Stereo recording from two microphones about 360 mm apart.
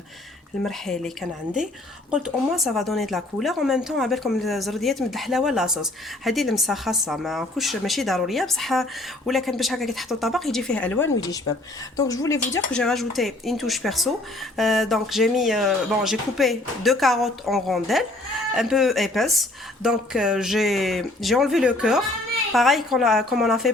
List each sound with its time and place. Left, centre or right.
0.6 s speech: centre